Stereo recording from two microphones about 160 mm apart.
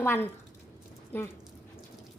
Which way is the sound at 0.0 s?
15° left (ahead or behind).